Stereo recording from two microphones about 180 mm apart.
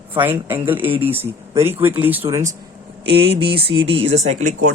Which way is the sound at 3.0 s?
30° right (ahead or behind).